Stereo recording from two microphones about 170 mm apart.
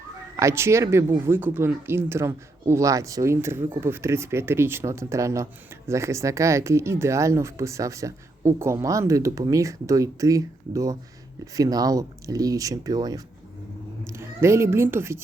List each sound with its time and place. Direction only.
0.3 s speech: 15° right (ahead or behind)